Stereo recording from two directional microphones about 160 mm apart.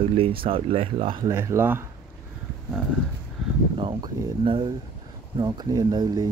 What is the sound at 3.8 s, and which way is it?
Speech, 30° right (ahead or behind).